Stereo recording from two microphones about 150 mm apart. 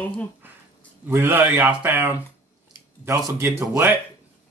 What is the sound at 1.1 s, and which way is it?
Speech, 15° right (ahead or behind).